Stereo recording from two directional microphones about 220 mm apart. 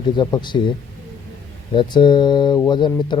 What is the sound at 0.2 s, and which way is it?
Speech, 20° left (ahead or behind).